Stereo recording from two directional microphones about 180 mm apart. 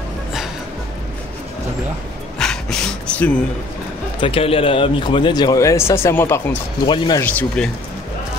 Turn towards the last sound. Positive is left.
turn(degrees=5)  # may be behind; listen again after turning